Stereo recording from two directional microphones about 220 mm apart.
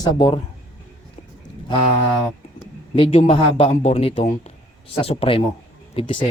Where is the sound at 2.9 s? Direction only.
25° left (ahead or behind).